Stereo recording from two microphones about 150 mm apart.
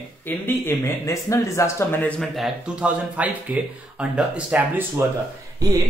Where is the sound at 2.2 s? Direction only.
5° right (ahead or behind).